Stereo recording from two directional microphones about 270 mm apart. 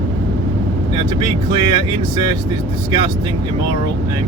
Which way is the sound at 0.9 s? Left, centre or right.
Centre.